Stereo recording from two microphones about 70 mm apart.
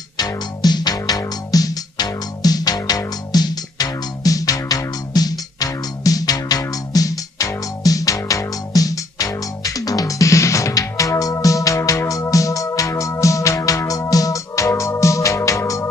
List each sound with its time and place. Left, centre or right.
0.2 s music: left